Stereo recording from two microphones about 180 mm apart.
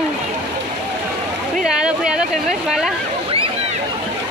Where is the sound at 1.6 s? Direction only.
5° right (ahead or behind).